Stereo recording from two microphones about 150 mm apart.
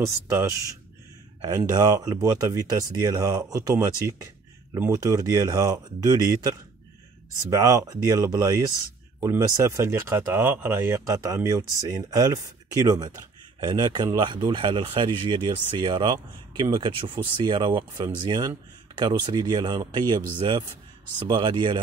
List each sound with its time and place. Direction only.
0.0 s speech: 15° right (ahead or behind); by 21.7 s 35° right (ahead or behind)